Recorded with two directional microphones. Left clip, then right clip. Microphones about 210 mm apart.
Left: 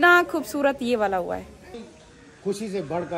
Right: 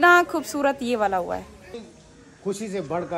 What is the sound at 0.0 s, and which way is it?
A woman's voice, 5° left (ahead or behind).